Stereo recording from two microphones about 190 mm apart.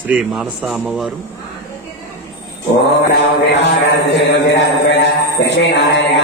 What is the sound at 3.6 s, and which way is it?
A man's voice, 65° left (ahead or behind).